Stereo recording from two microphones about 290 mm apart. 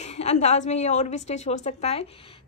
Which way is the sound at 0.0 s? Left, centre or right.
Left.